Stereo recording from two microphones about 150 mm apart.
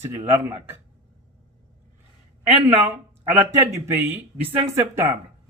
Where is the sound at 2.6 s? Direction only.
10° right (ahead or behind).